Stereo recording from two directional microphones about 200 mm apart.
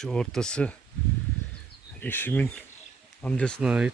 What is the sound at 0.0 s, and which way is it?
Speech, 5° left (ahead or behind).